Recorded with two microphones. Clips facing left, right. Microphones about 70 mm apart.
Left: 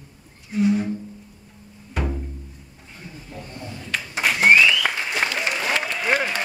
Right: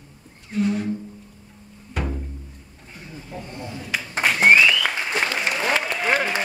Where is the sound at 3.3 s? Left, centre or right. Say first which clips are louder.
Right 3 dB; right.